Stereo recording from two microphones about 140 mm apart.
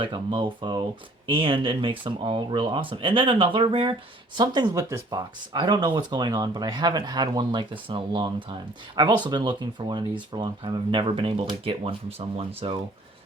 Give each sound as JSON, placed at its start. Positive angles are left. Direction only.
{"t": 0.0, "sound": "speech", "side_deg": -35}